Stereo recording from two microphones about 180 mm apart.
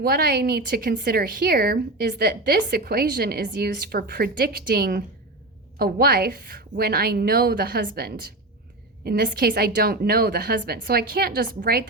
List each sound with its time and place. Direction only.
0.0 s a woman's voice: 60° right (ahead or behind)